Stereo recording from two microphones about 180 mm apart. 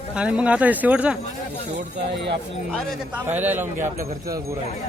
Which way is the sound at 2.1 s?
70° right (ahead or behind).